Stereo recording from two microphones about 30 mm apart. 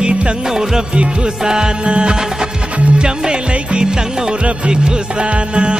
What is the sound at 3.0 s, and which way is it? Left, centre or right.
Music, right.